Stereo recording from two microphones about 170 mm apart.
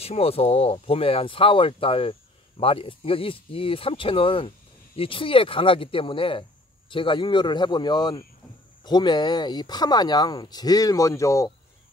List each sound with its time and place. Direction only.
0.0 s speech: 35° left (ahead or behind); by 11.5 s 20° left (ahead or behind)